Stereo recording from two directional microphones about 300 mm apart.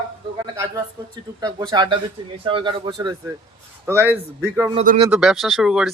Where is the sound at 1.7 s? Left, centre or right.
Centre.